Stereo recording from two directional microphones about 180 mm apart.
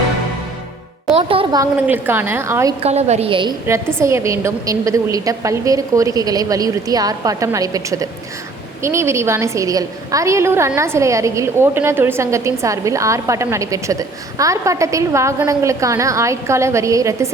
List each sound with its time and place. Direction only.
1.1 s music: 30° right (ahead or behind)
1.9 s a woman's voice: 10° right (ahead or behind)
2.8 s a woman's voice: 35° right (ahead or behind)
4.0 s a woman's voice: 15° right (ahead or behind)